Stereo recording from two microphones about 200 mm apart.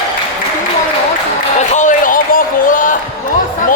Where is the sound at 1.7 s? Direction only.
40° left (ahead or behind).